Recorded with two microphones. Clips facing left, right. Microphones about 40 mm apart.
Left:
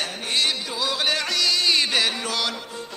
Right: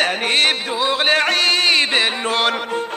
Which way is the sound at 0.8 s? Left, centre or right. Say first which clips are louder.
Right 8 dB; right.